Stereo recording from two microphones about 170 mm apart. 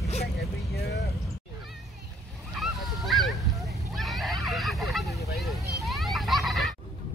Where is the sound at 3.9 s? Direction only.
Centre (ahead or behind).